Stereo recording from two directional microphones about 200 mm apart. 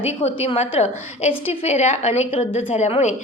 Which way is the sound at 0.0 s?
30° left (ahead or behind).